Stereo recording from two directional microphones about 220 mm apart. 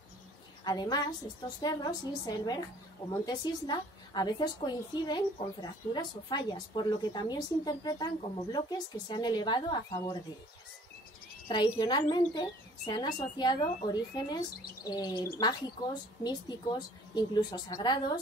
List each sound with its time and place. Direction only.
0.7 s a woman's voice: 20° left (ahead or behind)
11.4 s a woman's voice: 20° left (ahead or behind)